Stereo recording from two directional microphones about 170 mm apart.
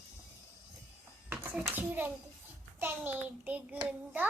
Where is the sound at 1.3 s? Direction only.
5° right (ahead or behind).